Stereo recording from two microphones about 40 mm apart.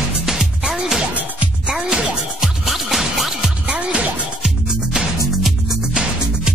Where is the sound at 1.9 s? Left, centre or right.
Centre.